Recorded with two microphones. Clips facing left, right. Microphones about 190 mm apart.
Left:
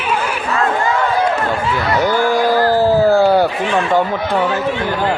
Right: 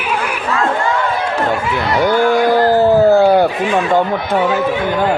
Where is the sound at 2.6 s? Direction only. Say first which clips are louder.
Right 3 dB; 20° right (ahead or behind).